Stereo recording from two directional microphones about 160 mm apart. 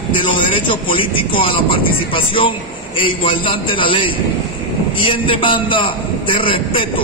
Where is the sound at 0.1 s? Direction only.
30° left (ahead or behind).